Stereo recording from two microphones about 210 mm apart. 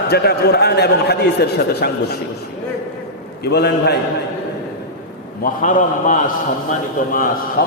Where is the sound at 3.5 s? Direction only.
50° left (ahead or behind).